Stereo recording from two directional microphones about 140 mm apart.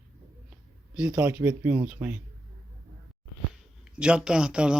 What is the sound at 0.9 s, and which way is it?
Speech, 10° right (ahead or behind).